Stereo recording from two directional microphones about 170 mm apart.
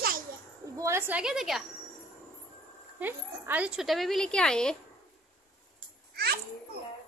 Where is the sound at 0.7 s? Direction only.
15° right (ahead or behind).